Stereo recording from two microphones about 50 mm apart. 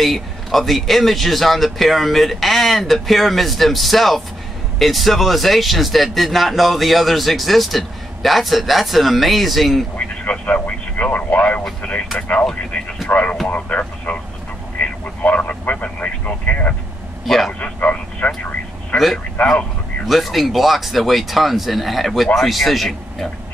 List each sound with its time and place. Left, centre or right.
0.0 s speech: centre
10.4 s speech: left
11.8 s speech: centre
13.1 s speech: left
17.5 s a sound: left
20.1 s speech: centre